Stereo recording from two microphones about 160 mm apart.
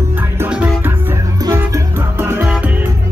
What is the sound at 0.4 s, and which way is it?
Music, 10° right (ahead or behind).